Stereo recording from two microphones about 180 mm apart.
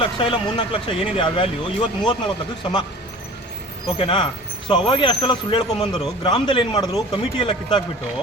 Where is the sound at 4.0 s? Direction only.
25° left (ahead or behind).